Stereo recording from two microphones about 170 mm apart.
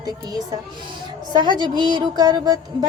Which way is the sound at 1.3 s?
25° right (ahead or behind).